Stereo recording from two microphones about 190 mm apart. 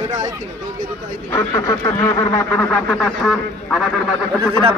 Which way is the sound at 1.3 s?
15° left (ahead or behind).